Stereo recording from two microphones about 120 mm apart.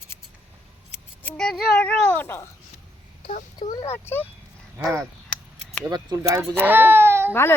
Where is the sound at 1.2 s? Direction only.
10° left (ahead or behind).